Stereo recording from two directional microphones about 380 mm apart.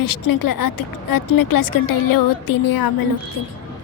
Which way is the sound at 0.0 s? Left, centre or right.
Left.